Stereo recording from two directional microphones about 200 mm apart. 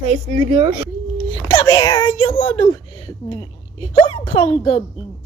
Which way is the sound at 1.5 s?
20° left (ahead or behind).